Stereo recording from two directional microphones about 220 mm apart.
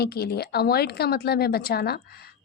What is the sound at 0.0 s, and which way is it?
A woman's voice, 45° left (ahead or behind).